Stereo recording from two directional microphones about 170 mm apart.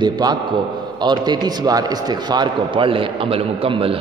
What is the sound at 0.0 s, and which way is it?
A man's voice, 25° right (ahead or behind).